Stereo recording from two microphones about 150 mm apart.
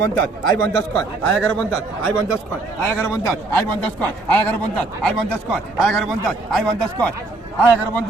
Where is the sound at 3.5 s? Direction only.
10° left (ahead or behind).